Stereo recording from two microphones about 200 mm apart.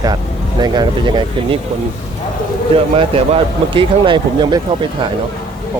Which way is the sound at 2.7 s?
30° right (ahead or behind).